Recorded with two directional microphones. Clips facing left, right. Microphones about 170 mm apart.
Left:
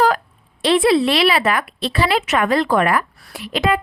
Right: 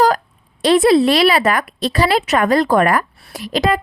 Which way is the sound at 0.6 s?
40° right (ahead or behind).